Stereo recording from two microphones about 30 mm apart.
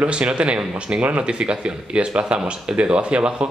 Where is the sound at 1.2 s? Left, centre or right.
Right.